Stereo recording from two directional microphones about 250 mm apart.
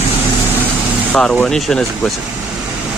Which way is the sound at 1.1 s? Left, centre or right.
Centre.